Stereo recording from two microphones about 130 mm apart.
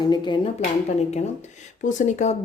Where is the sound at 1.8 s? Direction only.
70° left (ahead or behind).